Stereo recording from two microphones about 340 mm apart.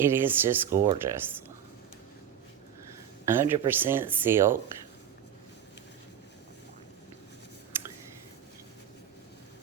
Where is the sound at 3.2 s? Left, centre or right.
Centre.